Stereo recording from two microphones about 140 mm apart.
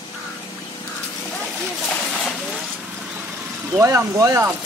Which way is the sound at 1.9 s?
10° left (ahead or behind).